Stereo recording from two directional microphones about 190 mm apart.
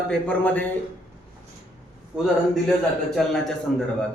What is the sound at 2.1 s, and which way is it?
A man's voice, 5° right (ahead or behind).